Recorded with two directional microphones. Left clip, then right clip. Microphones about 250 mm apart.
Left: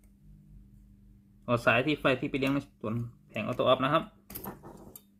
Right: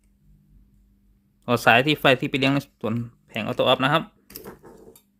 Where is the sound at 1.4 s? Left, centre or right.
Right.